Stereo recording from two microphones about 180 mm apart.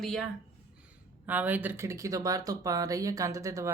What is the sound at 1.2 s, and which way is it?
Speech, 10° right (ahead or behind).